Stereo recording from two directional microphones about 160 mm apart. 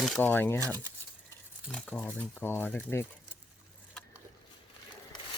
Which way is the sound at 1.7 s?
10° left (ahead or behind).